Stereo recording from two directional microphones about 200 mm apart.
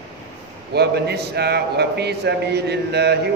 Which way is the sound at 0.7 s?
55° right (ahead or behind).